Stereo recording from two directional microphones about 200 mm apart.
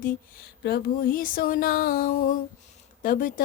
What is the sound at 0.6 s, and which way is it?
Speech, 50° left (ahead or behind).